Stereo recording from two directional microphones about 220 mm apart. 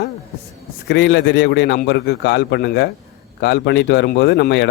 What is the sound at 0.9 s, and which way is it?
Speech, 50° left (ahead or behind).